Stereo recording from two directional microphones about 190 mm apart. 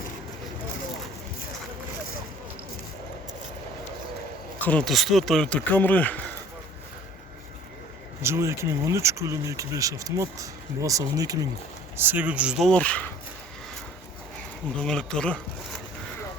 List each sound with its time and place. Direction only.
4.6 s speech: 5° left (ahead or behind)
8.2 s speech: 15° right (ahead or behind); by 13.1 s 5° left (ahead or behind)
14.8 s speech: 5° left (ahead or behind)